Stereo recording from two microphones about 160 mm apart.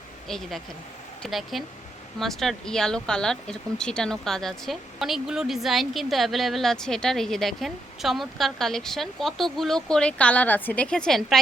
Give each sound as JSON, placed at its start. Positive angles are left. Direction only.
{"t": 0.3, "sound": "speech", "side_deg": 0}